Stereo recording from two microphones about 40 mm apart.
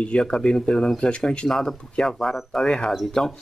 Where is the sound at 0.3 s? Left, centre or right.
Left.